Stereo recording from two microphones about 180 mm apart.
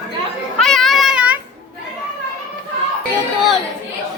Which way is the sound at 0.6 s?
Centre (ahead or behind).